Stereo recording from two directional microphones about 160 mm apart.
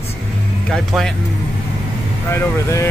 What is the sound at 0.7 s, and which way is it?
Speech, centre (ahead or behind).